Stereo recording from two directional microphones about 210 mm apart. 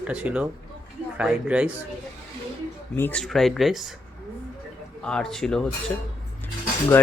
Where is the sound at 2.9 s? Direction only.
10° left (ahead or behind).